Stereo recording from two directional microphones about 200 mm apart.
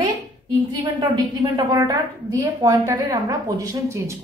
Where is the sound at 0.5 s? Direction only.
15° right (ahead or behind).